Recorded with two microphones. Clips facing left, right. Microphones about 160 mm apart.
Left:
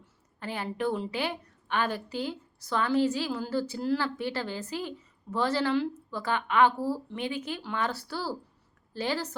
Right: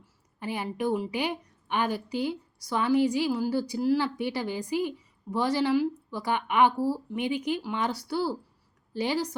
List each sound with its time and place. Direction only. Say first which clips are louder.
0.3 s a woman's voice: right 2 dB; 15° right (ahead or behind)